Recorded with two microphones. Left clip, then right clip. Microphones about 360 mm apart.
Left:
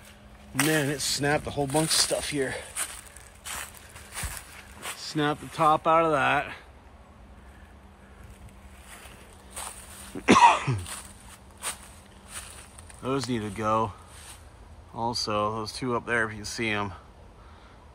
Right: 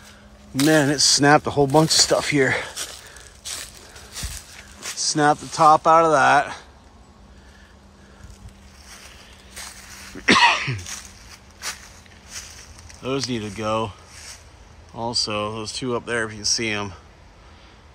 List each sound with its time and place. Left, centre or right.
0.7 s speech: right
4.9 s speech: centre
9.6 s cough: centre
13.0 s speech: centre
15.0 s speech: centre